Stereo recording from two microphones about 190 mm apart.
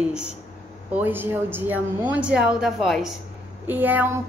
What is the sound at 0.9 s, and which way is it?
A woman's voice, 10° right (ahead or behind).